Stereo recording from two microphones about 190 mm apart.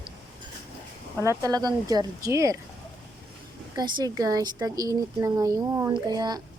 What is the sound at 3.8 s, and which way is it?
Speech, 20° right (ahead or behind).